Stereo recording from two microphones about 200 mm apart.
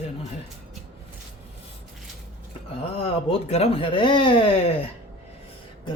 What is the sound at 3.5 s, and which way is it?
Speech, 30° left (ahead or behind).